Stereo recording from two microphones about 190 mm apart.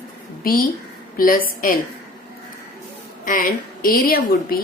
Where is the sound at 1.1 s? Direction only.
45° left (ahead or behind).